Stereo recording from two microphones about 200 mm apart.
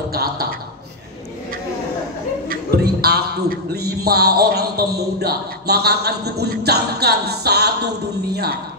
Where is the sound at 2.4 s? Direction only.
50° right (ahead or behind).